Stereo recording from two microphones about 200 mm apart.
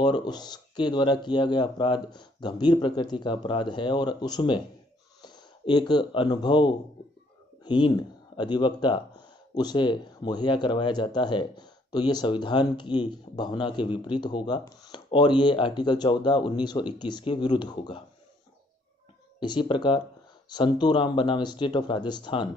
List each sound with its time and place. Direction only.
0.0 s speech: 20° left (ahead or behind)
19.4 s speech: 25° left (ahead or behind)